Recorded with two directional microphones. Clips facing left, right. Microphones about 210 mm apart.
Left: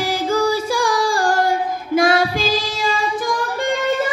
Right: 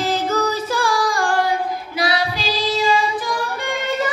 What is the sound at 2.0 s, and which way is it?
Music, 50° left (ahead or behind).